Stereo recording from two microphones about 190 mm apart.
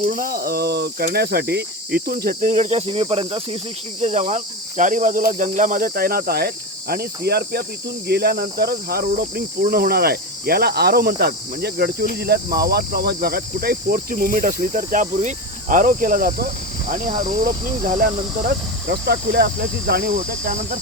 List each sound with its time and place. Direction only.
0.1 s cricket: 50° right (ahead or behind)
17.2 s speech: 40° right (ahead or behind)